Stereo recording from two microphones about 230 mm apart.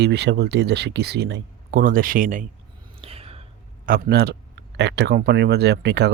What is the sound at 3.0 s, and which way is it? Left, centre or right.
Whispering, right.